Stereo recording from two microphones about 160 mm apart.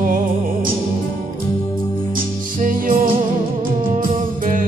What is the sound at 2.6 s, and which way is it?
Music, 60° right (ahead or behind).